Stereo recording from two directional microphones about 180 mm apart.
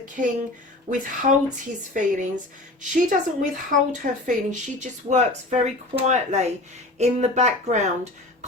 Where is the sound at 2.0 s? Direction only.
45° right (ahead or behind).